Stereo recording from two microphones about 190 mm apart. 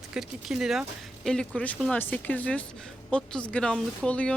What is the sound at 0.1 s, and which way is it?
Speech, centre (ahead or behind).